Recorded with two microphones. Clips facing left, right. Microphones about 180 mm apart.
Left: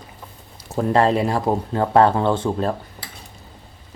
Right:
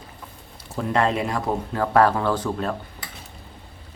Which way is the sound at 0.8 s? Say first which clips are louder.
Left 5 dB; 35° left (ahead or behind).